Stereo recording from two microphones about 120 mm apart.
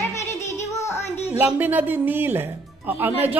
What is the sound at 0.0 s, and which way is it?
Music, 25° left (ahead or behind).